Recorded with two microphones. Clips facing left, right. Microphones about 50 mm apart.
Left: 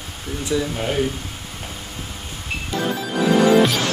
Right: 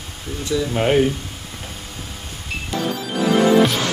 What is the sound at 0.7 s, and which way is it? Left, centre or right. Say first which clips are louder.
Speech: right 6 dB; right.